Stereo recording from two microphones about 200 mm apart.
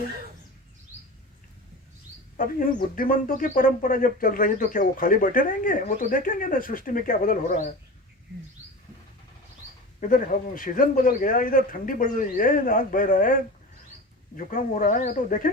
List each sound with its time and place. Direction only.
2.4 s speech: 45° left (ahead or behind)
10.0 s speech: 45° left (ahead or behind)
14.3 s speech: 40° left (ahead or behind)